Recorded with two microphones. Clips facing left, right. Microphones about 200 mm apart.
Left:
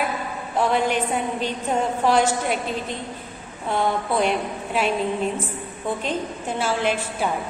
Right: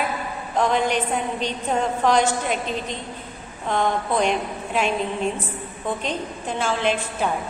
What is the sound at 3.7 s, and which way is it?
A woman's voice, 10° left (ahead or behind).